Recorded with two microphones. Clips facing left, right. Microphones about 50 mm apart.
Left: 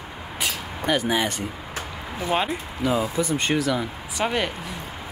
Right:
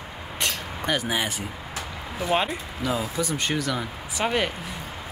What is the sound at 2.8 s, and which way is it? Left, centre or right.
Speech, left.